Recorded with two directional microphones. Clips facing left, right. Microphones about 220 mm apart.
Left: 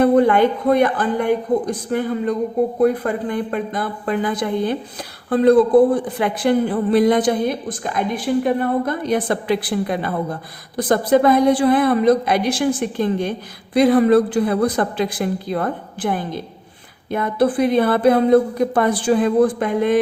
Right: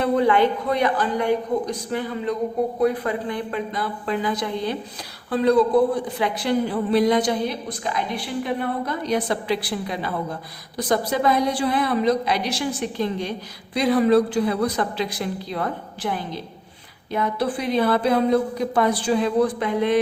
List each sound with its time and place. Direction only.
0.0 s a woman's voice: 50° left (ahead or behind)